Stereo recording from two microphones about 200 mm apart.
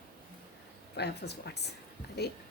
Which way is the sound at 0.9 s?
55° left (ahead or behind).